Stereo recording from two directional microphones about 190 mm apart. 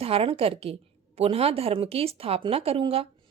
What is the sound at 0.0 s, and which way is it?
Speech, 30° right (ahead or behind).